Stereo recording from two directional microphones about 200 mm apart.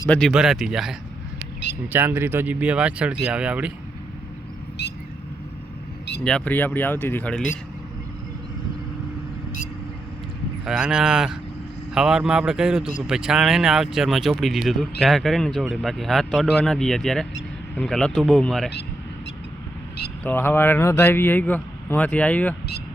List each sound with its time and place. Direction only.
0.1 s speech: centre (ahead or behind)
4.8 s vehicle: 55° left (ahead or behind)
6.2 s a man's voice: 5° left (ahead or behind)
10.7 s speech: 5° right (ahead or behind)
20.2 s a man's voice: 10° left (ahead or behind)